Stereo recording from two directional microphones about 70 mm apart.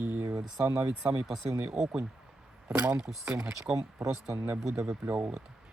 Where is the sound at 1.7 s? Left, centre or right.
Centre.